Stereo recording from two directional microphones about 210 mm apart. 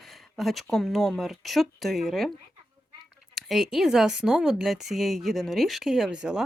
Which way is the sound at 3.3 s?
Centre (ahead or behind).